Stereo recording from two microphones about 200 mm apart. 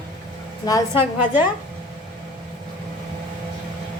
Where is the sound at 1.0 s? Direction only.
10° right (ahead or behind).